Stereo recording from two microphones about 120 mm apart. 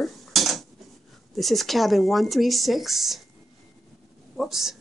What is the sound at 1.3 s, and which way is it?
Speech, centre (ahead or behind).